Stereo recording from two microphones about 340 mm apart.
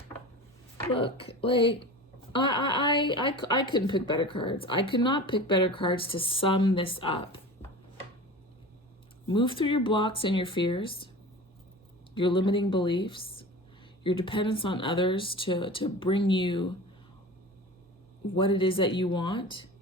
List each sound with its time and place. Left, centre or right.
0.8 s a woman's voice: centre
9.2 s a woman's voice: centre
12.1 s a woman's voice: centre
18.3 s a woman's voice: centre